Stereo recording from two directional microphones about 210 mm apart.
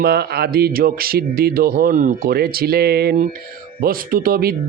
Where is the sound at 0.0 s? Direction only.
50° right (ahead or behind).